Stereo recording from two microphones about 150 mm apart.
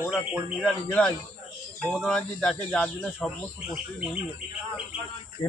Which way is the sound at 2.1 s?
5° left (ahead or behind).